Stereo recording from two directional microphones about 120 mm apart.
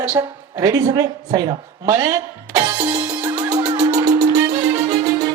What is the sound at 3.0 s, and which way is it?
Music, 15° right (ahead or behind).